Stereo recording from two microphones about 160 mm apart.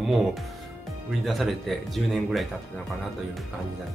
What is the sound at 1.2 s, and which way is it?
A man's voice, centre (ahead or behind).